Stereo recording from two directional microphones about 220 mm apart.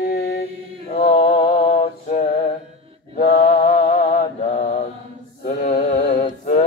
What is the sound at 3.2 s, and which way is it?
Mantra, 35° left (ahead or behind).